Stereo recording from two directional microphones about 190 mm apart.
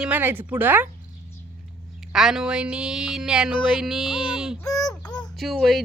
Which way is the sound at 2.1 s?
5° right (ahead or behind).